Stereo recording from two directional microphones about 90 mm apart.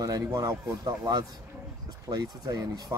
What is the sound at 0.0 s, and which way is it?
Speech, 45° right (ahead or behind).